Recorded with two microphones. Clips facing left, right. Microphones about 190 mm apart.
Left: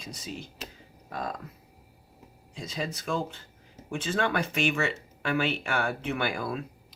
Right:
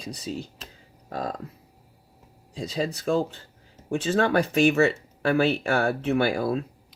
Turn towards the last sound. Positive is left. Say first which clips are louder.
# right 7 dB
turn(degrees=-35)  # may be behind; listen again after turning